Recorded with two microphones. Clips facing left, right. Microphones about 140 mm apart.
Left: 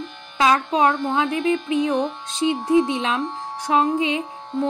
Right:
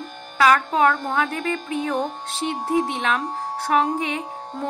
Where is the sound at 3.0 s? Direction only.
15° left (ahead or behind).